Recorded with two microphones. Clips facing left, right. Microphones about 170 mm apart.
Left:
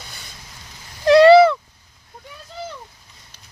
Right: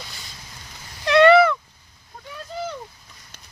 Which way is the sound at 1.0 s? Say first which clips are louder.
Left 5 dB; 35° left (ahead or behind).